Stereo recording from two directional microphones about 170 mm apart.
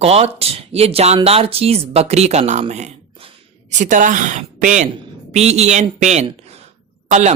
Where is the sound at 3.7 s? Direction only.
50° right (ahead or behind).